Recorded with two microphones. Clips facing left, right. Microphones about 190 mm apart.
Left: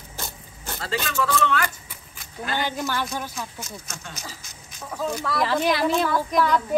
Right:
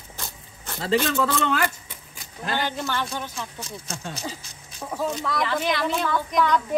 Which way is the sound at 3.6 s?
30° right (ahead or behind).